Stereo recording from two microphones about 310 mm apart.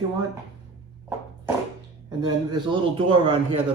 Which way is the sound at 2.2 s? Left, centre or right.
Centre.